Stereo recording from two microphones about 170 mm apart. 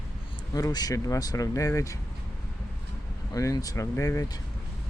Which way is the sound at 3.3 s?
20° left (ahead or behind).